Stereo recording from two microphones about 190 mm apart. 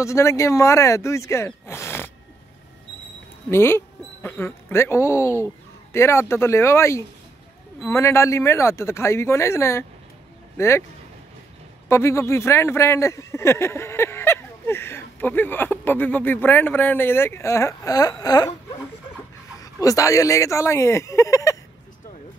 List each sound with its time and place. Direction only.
0.0 s speech: 15° left (ahead or behind)
3.4 s a man's voice: 15° left (ahead or behind)
11.9 s a man's voice: 15° left (ahead or behind)
19.6 s a man's voice: 15° left (ahead or behind)